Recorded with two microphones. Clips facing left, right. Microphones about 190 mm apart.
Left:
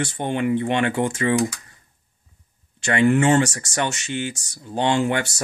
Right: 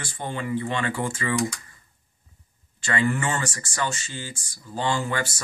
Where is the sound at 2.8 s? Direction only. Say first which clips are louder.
Left 7 dB; 70° left (ahead or behind).